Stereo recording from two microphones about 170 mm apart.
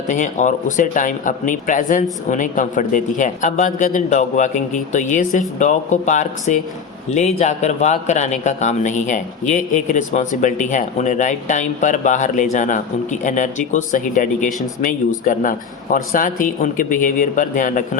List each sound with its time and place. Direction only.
0.1 s speech: 45° left (ahead or behind)